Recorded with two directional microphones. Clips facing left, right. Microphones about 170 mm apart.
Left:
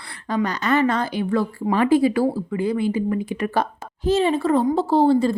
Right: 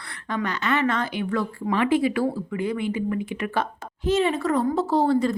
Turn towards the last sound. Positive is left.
turn(degrees=30)  # may be behind; listen again after turning